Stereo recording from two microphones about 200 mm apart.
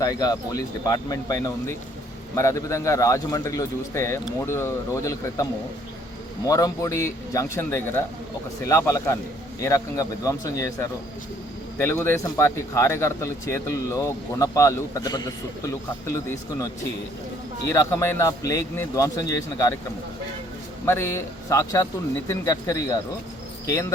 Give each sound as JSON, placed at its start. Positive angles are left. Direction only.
{"t": 0.0, "sound": "speech", "side_deg": 20}
{"t": 17.7, "sound": "speech", "side_deg": 15}
{"t": 20.8, "sound": "speech", "side_deg": 15}